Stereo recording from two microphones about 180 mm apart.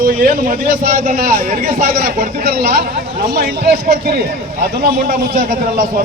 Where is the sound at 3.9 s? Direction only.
60° right (ahead or behind).